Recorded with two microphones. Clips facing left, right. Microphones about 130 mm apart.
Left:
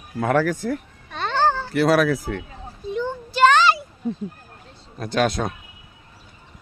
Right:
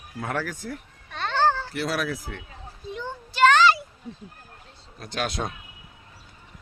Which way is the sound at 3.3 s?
25° left (ahead or behind).